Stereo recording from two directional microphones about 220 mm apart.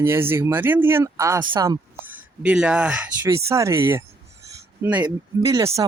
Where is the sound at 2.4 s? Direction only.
5° right (ahead or behind).